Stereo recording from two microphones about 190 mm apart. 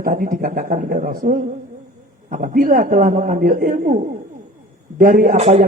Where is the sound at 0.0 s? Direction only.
50° right (ahead or behind).